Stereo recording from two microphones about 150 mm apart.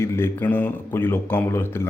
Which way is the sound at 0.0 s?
15° left (ahead or behind).